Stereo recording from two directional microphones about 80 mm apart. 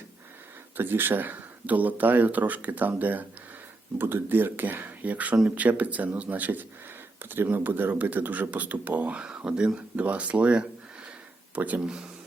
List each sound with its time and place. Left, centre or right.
0.8 s speech: right